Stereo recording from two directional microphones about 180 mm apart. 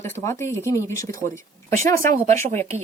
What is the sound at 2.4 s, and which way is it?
Speech, 35° right (ahead or behind).